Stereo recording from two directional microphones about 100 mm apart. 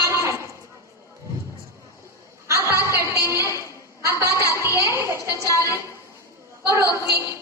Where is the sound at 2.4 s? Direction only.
30° right (ahead or behind).